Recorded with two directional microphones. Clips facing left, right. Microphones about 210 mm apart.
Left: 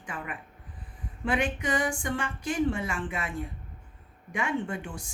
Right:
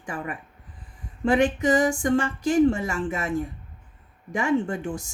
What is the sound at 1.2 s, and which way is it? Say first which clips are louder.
Speech: right 8 dB; 45° right (ahead or behind).